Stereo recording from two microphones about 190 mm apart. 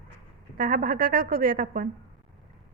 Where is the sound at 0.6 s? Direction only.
45° right (ahead or behind).